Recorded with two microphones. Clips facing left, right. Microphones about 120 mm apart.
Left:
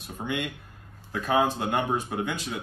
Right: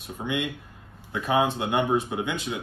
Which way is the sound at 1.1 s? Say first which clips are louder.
Right 1 dB; 5° right (ahead or behind).